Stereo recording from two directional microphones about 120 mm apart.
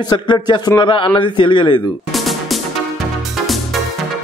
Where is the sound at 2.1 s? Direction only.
Centre (ahead or behind).